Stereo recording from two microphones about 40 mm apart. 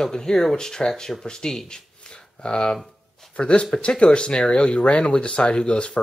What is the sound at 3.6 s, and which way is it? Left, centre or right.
Speech, centre.